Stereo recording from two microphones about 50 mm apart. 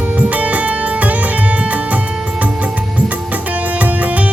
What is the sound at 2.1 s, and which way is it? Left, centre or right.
Music, centre.